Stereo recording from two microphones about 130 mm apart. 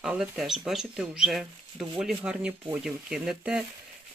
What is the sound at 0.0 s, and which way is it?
Speech, 5° right (ahead or behind).